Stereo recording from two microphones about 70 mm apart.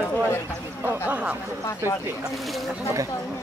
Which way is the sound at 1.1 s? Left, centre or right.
Centre.